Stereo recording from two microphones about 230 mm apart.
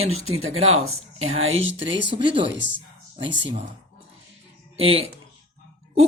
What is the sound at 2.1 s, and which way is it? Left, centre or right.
Speech, right.